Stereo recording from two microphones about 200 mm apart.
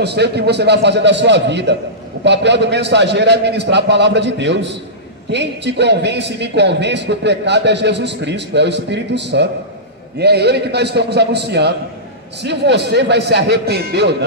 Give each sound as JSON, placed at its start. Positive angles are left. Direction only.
{"t": 0.0, "sound": "a man's voice", "side_deg": -55}